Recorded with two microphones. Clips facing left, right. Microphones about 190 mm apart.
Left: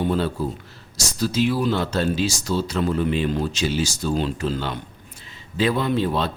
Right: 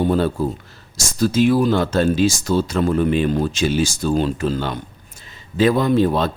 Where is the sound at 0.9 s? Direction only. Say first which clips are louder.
Right 5 dB; 50° right (ahead or behind).